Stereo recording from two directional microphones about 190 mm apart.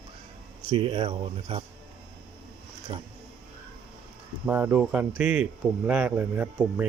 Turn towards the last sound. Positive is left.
turn(degrees=-10)  # may be behind; listen again after turning